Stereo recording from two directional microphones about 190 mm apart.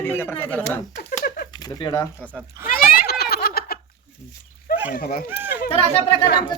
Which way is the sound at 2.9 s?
55° left (ahead or behind).